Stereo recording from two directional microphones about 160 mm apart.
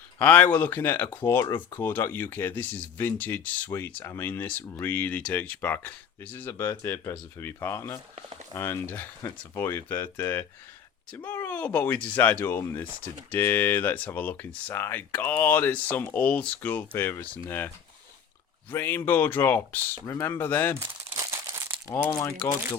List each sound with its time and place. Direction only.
0.2 s speech: 10° left (ahead or behind)
8.1 s speech: 40° right (ahead or behind)
8.5 s speech: 15° left (ahead or behind)
18.7 s speech: 15° left (ahead or behind)
21.0 s crumpling: 15° right (ahead or behind)
21.8 s speech: 20° left (ahead or behind)